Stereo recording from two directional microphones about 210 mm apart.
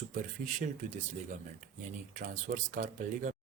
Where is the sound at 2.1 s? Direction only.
40° right (ahead or behind).